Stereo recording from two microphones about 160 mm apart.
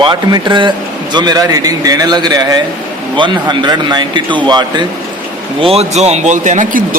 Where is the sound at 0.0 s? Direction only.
30° right (ahead or behind).